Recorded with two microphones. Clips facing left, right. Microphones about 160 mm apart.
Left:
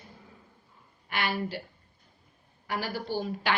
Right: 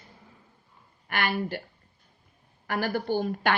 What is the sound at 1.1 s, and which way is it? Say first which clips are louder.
Speech: right 2 dB; 55° right (ahead or behind).